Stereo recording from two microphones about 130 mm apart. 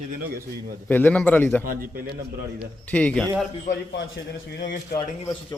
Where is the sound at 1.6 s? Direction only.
90° right.